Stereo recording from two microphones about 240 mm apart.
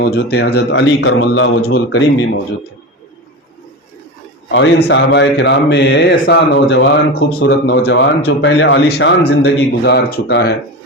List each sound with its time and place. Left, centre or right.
0.0 s speech: left
4.5 s speech: left